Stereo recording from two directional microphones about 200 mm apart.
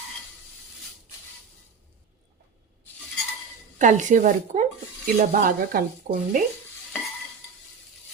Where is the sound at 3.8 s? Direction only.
40° right (ahead or behind).